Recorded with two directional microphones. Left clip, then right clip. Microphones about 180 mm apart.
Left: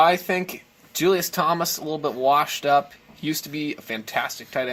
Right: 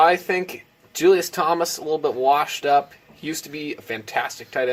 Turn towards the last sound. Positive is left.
turn(degrees=25)  # may be behind; listen again after turning